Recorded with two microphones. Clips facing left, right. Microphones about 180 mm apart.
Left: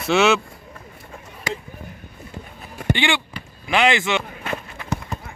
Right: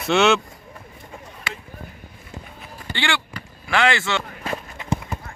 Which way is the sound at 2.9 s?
20° left (ahead or behind).